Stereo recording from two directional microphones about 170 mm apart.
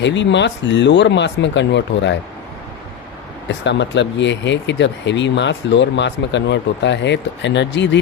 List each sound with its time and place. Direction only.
0.0 s speech: 90° left
3.6 s speech: 90° left